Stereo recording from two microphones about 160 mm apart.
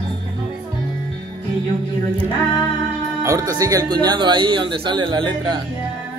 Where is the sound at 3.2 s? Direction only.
20° right (ahead or behind).